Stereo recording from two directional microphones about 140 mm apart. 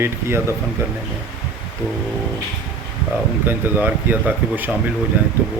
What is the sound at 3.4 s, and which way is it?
A man's voice, 15° right (ahead or behind).